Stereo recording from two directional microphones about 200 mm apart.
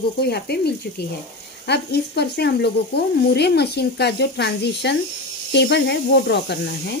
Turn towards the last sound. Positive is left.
turn(degrees=55)  # may be behind; listen again after turning